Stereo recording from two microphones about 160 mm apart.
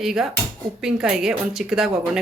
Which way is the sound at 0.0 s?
Centre (ahead or behind).